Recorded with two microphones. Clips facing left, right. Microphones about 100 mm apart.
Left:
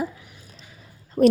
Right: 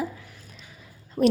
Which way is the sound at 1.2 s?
Centre (ahead or behind).